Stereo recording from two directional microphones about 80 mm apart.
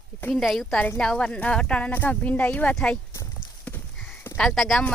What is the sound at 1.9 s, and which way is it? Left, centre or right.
Speech, left.